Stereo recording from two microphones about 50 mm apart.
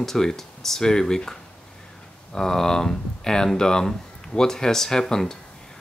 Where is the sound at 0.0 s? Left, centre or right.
Centre.